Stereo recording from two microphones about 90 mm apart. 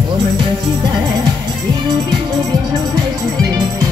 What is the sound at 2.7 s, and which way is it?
Music, 45° right (ahead or behind).